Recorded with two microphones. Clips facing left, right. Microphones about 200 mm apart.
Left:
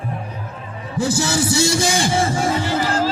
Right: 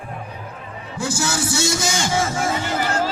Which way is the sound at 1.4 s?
60° left (ahead or behind).